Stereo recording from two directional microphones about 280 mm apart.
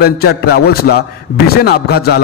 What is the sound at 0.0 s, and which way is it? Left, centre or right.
A man's voice, left.